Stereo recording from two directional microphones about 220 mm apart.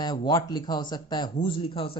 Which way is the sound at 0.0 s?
20° left (ahead or behind).